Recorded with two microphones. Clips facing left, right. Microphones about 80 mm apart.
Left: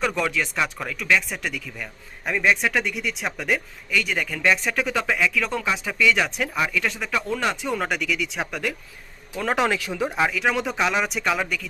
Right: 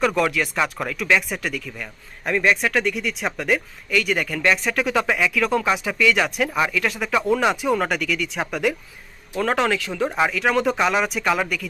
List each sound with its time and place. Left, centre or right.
0.0 s a man's voice: centre
9.6 s speech: left
9.9 s speech: centre